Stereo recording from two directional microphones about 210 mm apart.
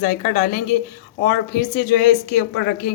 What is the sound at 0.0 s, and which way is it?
Speech, 40° left (ahead or behind).